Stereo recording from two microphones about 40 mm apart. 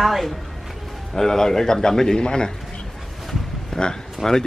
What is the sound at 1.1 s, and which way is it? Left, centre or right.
A man's voice, centre.